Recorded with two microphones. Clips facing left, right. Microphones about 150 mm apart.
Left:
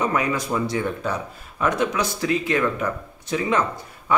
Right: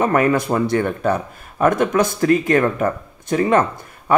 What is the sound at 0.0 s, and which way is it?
Speech, 55° right (ahead or behind).